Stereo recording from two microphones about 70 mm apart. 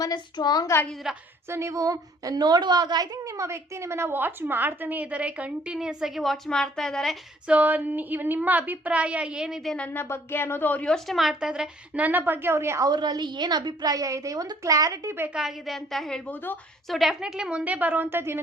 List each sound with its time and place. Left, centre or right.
0.0 s a woman's voice: left
1.1 s a woman's voice: centre
1.5 s a woman's voice: right
3.2 s a woman's voice: right; by 7.2 s centre
7.4 s a woman's voice: right
9.7 s a woman's voice: left
10.8 s a woman's voice: centre
11.3 s a woman's voice: centre
11.9 s a woman's voice: right
12.9 s a woman's voice: right
15.4 s a woman's voice: centre
16.3 s a woman's voice: left
16.9 s a woman's voice: centre
17.6 s a woman's voice: right